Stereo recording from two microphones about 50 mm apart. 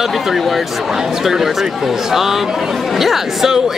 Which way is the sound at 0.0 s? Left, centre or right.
Centre.